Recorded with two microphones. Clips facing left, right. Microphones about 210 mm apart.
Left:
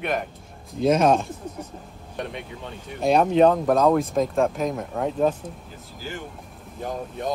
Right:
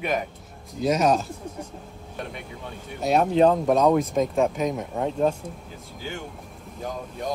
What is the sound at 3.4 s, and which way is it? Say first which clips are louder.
A man's voice: right 1 dB; centre (ahead or behind).